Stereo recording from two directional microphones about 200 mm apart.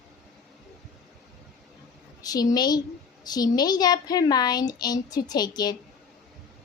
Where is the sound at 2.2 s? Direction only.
20° left (ahead or behind).